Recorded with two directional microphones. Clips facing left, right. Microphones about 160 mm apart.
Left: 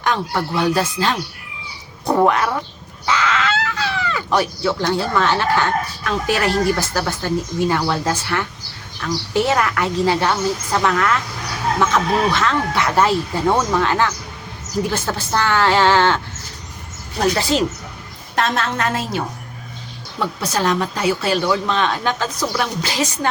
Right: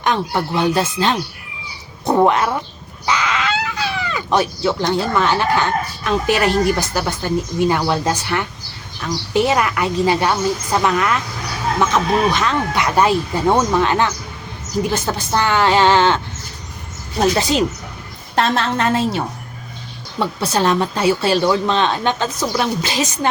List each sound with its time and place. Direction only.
0.0 s speech: 20° right (ahead or behind)
3.1 s a sound: 15° right (ahead or behind)
6.1 s a woman's voice: 20° right (ahead or behind)
18.3 s a woman's voice: 30° right (ahead or behind)